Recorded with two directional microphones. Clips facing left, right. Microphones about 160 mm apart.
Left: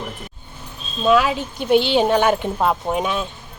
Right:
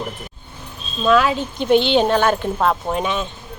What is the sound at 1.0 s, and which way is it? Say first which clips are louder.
Speech: right 1 dB; 10° left (ahead or behind).